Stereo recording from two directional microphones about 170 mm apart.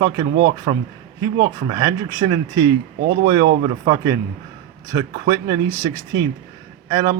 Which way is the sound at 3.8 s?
20° right (ahead or behind).